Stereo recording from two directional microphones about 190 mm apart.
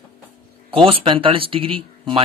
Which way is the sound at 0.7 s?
30° right (ahead or behind).